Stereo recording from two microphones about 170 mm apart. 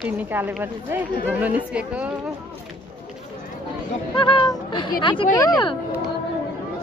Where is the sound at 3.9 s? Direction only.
30° left (ahead or behind).